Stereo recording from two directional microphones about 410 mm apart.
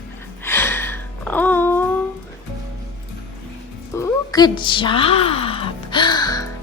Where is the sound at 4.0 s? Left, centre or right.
Centre.